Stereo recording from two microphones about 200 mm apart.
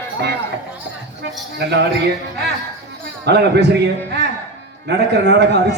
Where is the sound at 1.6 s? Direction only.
55° right (ahead or behind).